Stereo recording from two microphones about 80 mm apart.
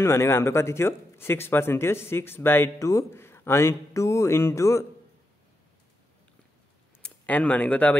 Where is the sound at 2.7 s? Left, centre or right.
Left.